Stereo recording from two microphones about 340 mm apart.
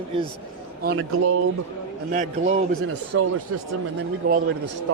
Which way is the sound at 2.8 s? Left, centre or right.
Right.